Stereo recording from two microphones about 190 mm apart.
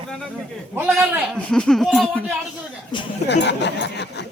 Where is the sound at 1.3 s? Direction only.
5° left (ahead or behind).